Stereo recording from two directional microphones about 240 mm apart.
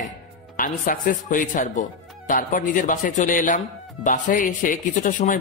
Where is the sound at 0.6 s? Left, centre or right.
Left.